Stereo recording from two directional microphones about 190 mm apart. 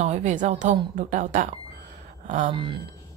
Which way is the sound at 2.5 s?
25° right (ahead or behind).